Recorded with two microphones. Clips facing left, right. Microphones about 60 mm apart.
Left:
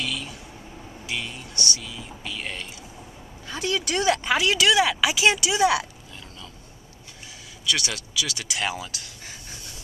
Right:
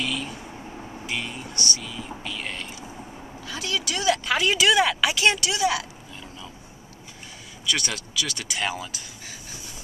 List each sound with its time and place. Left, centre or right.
0.0 s vehicle: centre
1.0 s speech: centre
2.2 s whispering: centre
3.4 s speech: left
4.3 s speech: centre
5.6 s speech: left
7.6 s speech: centre